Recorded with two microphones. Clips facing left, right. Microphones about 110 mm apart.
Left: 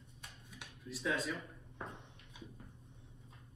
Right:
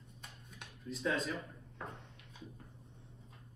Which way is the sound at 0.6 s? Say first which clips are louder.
Right 3 dB; 5° left (ahead or behind).